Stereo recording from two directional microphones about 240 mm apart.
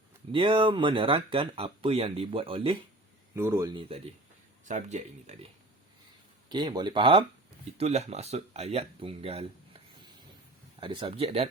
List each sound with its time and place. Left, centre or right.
0.3 s speech: right
3.3 s speech: centre
6.5 s speech: centre